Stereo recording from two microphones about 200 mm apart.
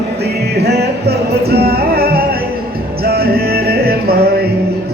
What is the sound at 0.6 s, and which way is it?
Music, 55° right (ahead or behind).